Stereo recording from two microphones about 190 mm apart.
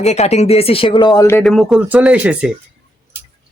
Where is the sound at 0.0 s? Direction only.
35° left (ahead or behind); by 1.4 s 15° left (ahead or behind).